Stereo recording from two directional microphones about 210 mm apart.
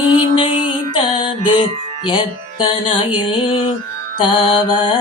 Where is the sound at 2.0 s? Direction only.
25° left (ahead or behind).